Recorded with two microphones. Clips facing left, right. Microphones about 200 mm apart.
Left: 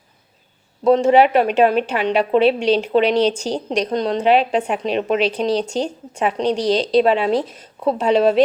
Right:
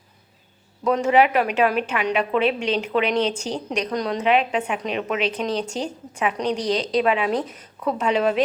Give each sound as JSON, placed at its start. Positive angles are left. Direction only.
{"t": 0.9, "sound": "a woman's voice", "side_deg": 30}